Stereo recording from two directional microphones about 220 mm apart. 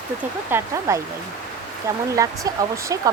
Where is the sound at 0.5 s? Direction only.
15° right (ahead or behind).